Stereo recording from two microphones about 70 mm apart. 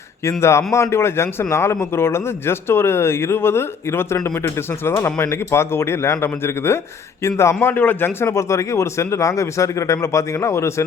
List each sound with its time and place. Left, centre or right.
0.3 s a man's voice: left